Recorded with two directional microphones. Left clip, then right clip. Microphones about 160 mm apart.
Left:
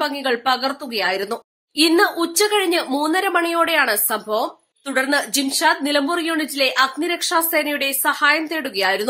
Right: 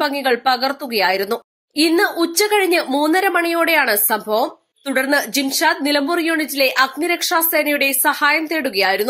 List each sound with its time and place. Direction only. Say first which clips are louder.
0.0 s a woman's voice: right 3 dB; 20° right (ahead or behind)